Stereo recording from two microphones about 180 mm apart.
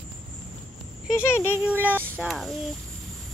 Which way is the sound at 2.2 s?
Centre (ahead or behind).